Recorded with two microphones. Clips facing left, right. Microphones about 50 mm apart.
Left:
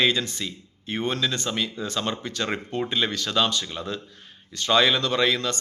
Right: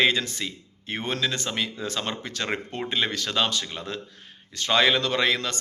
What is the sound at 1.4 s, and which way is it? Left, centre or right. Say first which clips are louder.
Speech: left 1 dB; right.